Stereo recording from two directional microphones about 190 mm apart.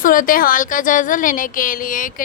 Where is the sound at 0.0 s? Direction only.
45° left (ahead or behind).